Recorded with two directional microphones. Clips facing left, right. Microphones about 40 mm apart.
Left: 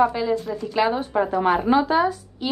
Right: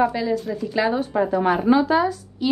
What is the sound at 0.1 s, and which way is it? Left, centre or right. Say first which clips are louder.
A woman's voice: even; left.